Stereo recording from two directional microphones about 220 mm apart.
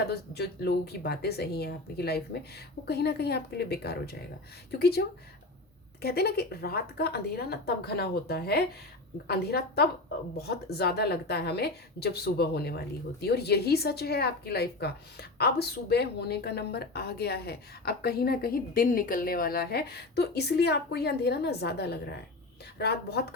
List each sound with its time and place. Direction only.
0.1 s speech: 45° left (ahead or behind)